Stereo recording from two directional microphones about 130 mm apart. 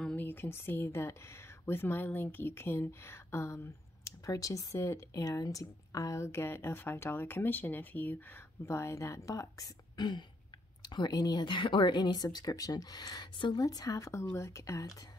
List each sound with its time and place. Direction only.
0.0 s speech: 10° left (ahead or behind)